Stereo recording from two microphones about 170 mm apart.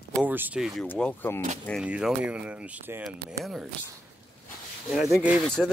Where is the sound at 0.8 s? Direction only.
10° left (ahead or behind).